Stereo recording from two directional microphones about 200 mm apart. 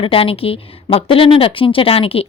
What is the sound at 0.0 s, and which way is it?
A woman's voice, 30° left (ahead or behind).